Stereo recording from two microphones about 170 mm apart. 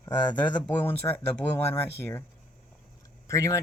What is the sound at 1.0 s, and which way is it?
Speech, 20° left (ahead or behind).